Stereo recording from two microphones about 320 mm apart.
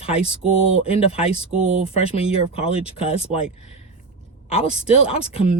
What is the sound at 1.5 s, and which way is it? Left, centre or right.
Speech, right.